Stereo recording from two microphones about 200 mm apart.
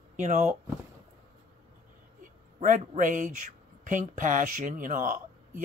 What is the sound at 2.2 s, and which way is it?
Speech, 40° right (ahead or behind).